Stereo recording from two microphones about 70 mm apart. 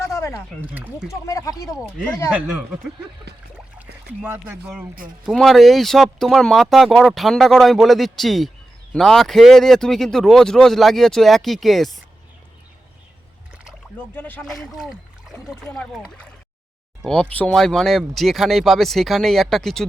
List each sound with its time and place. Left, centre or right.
0.0 s a sound: left
0.7 s speech: right
1.3 s speech: left
2.3 s speech: centre
3.8 s a sound: right
5.4 s speech: centre
14.2 s speech: left
14.4 s speech: centre
17.1 s speech: centre